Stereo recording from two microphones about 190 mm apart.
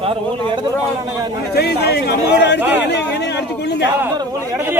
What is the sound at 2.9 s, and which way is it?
A man's voice, 65° left (ahead or behind).